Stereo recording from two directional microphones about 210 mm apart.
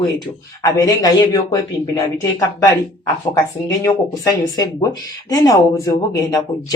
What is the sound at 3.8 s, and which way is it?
A man's voice, 15° left (ahead or behind).